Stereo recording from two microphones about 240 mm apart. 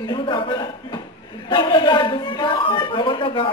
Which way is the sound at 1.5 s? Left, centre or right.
Centre.